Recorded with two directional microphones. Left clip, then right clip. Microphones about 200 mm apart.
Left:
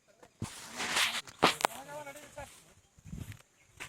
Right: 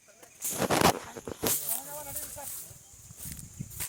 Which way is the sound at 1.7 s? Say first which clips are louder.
Right 2 dB; 5° left (ahead or behind).